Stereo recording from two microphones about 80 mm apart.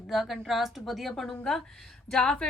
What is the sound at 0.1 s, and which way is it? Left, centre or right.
A woman's voice, centre.